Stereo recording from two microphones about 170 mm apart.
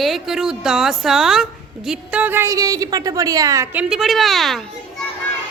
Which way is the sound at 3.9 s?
Centre (ahead or behind).